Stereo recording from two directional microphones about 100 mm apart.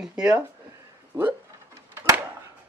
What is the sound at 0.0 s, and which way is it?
Speech, 10° right (ahead or behind).